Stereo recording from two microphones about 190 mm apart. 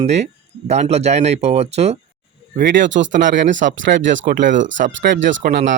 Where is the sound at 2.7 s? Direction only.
70° right (ahead or behind).